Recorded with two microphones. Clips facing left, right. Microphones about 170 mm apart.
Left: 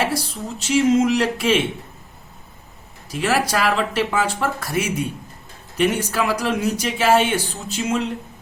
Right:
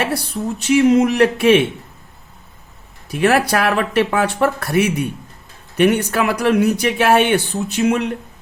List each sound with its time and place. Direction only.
0.0 s speech: 60° right (ahead or behind)
3.1 s speech: 60° right (ahead or behind)